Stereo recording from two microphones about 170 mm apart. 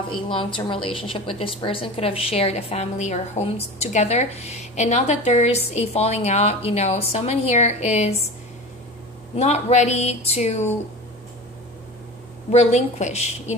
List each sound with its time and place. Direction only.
0.1 s a woman's voice: 30° left (ahead or behind)
9.4 s a woman's voice: 40° left (ahead or behind)
12.4 s a woman's voice: 40° left (ahead or behind)